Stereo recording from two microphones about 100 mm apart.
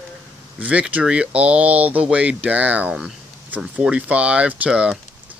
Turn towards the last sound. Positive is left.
turn(degrees=-10)  # may be behind; listen again after turning